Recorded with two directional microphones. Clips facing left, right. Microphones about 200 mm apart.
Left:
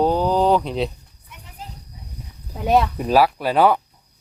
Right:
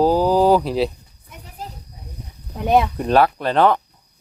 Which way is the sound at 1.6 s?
40° right (ahead or behind).